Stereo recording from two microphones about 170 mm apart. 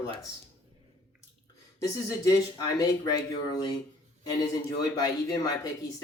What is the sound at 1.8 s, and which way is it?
Speech, 20° left (ahead or behind).